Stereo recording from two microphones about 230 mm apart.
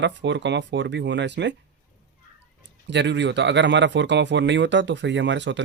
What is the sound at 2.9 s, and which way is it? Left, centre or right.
Speech, right.